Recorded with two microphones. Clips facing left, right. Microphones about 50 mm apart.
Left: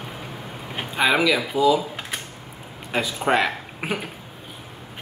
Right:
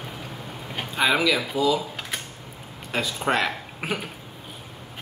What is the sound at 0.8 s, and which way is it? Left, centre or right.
Speech, centre.